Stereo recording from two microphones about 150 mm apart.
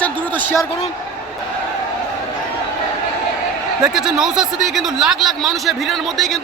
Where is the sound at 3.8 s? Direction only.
5° right (ahead or behind).